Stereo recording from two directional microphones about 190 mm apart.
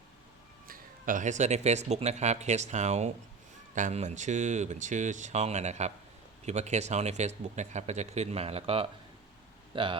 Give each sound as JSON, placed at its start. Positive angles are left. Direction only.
{"t": 0.7, "sound": "speech", "side_deg": -45}